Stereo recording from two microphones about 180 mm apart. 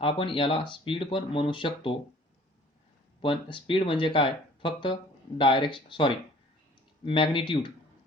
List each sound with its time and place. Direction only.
0.0 s speech: 30° left (ahead or behind)
3.2 s speech: 30° left (ahead or behind)